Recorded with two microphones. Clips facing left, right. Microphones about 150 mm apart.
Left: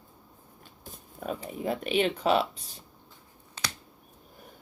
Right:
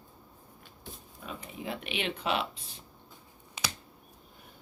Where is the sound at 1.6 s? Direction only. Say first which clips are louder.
Left 9 dB; 40° left (ahead or behind).